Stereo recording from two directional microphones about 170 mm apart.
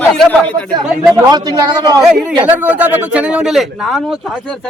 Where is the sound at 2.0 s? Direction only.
Centre (ahead or behind).